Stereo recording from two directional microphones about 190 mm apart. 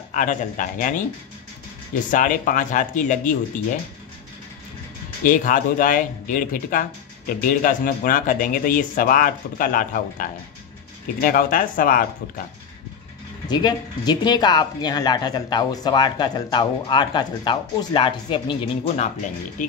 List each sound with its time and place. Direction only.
0.1 s speech: 40° left (ahead or behind)
2.0 s speech: 45° left (ahead or behind)
5.2 s speech: 45° left (ahead or behind)
13.5 s speech: 20° left (ahead or behind)